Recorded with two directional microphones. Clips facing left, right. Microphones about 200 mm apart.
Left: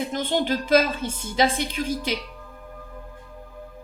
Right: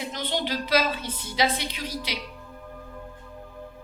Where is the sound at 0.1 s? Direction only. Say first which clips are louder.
Left 4 dB; 50° left (ahead or behind).